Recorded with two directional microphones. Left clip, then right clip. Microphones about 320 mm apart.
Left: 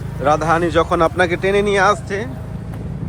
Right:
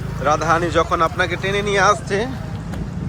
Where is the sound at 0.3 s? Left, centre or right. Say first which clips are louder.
Left 2 dB; centre.